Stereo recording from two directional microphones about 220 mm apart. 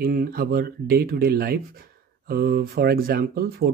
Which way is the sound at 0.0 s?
40° right (ahead or behind).